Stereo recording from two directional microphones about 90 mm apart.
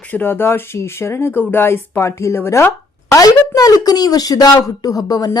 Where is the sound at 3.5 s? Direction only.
45° left (ahead or behind).